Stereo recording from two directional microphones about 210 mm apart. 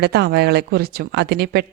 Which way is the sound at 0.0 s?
50° right (ahead or behind).